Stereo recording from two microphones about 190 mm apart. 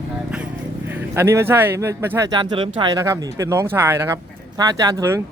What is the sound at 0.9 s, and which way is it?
Speech, 10° right (ahead or behind).